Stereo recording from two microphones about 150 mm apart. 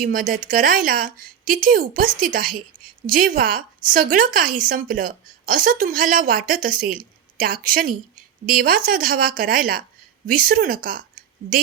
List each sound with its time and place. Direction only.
0.0 s a woman's voice: 70° right (ahead or behind)